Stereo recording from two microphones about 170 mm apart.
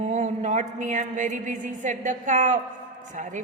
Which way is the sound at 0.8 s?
45° right (ahead or behind).